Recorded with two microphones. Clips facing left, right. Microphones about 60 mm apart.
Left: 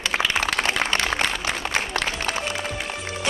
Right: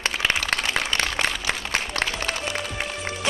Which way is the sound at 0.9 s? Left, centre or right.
Left.